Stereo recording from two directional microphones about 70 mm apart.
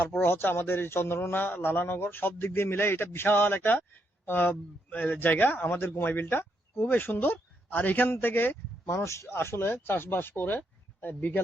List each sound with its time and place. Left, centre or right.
0.0 s speech: left
8.9 s speech: left